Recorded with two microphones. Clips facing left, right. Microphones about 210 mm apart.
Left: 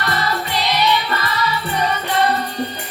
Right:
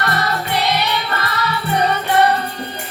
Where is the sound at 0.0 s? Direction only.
60° right (ahead or behind).